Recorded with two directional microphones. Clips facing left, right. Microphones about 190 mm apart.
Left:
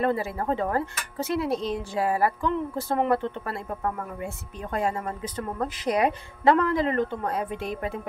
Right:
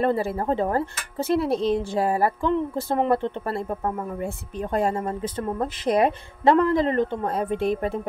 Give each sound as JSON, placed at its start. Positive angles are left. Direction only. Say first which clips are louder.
{"t": 0.0, "sound": "speech", "louder": "right 3 dB", "side_deg": -30}